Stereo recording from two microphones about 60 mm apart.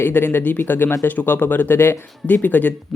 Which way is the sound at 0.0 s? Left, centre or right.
Left.